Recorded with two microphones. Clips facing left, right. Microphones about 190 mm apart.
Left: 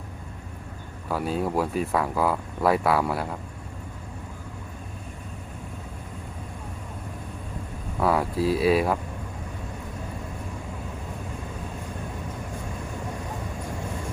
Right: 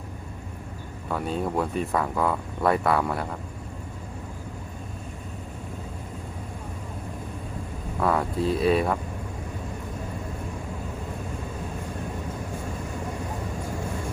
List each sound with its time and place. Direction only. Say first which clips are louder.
1.0 s speech: left 1 dB; 5° left (ahead or behind)
7.9 s speech: left 1 dB; 5° left (ahead or behind)